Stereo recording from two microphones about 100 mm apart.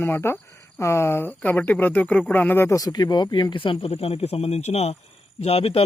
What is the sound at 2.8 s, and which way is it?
A man's voice, 40° left (ahead or behind).